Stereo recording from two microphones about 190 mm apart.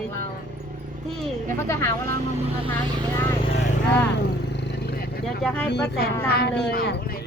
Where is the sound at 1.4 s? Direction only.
15° left (ahead or behind).